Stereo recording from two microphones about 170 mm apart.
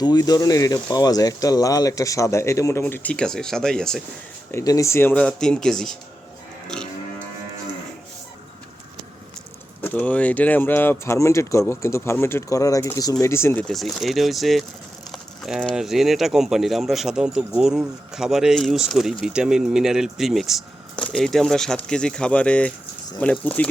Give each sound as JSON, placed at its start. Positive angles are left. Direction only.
{"t": 0.0, "sound": "speech", "side_deg": 25}
{"t": 4.5, "sound": "speech", "side_deg": 20}
{"t": 6.7, "sound": "cattle", "side_deg": 5}
{"t": 9.8, "sound": "speech", "side_deg": 10}